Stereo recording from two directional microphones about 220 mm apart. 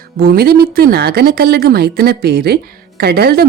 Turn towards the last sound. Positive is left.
turn(degrees=-45)  # may be behind; listen again after turning